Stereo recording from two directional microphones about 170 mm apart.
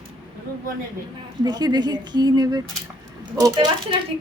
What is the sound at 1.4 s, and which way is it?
A woman's voice, 25° right (ahead or behind).